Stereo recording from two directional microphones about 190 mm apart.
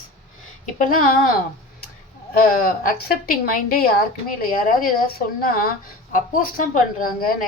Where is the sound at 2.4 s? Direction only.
50° left (ahead or behind).